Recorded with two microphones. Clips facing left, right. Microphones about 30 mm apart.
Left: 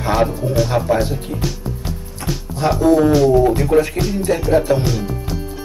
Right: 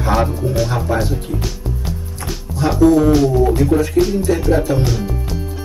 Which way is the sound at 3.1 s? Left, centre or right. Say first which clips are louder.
Left 1 dB; centre.